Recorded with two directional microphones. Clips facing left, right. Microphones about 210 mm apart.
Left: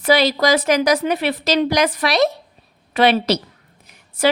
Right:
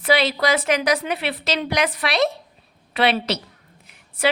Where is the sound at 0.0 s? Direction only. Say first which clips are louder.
Left 4 dB; 40° left (ahead or behind).